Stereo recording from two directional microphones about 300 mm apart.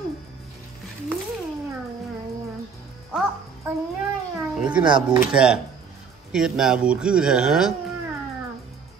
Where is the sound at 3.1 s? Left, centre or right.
Centre.